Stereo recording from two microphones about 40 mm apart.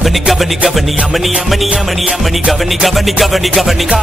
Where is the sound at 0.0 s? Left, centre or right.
Centre.